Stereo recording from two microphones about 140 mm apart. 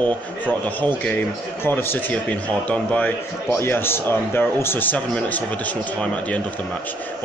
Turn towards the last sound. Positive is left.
turn(degrees=10)  # may be behind; listen again after turning